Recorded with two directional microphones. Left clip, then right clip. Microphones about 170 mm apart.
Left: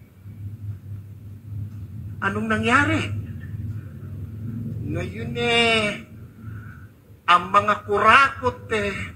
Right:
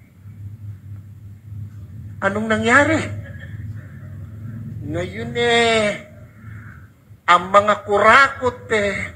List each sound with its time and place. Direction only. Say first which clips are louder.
2.1 s a man's voice: right 4 dB; 25° right (ahead or behind)
4.9 s a man's voice: right 6 dB; 25° right (ahead or behind)
7.2 s a man's voice: right 4 dB; 25° right (ahead or behind)